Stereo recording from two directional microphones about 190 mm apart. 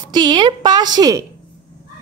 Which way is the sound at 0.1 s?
25° right (ahead or behind).